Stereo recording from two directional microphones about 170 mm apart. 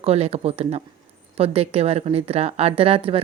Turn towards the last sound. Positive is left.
turn(degrees=-35)  # may be behind; listen again after turning